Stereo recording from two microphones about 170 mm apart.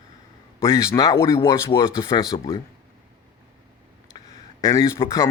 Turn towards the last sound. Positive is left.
turn(degrees=15)  # may be behind; listen again after turning